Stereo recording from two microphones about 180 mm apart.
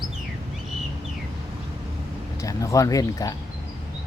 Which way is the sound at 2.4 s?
20° left (ahead or behind).